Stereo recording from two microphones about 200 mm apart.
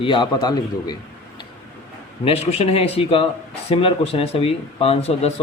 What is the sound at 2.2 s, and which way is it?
Speech, 30° left (ahead or behind).